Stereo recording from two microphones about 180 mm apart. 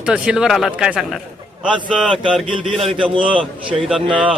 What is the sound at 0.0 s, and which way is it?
A man's voice, 5° right (ahead or behind).